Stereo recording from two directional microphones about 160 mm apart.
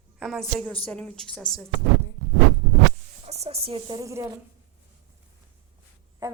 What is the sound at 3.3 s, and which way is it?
Speech, 40° right (ahead or behind).